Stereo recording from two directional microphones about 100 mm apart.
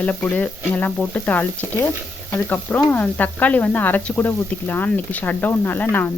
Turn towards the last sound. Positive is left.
turn(degrees=20)  # may be behind; listen again after turning